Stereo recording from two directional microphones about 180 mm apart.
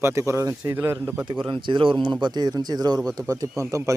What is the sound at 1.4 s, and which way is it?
Speech, 25° right (ahead or behind).